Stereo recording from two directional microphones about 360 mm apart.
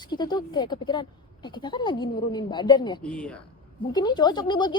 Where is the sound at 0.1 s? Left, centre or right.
Centre.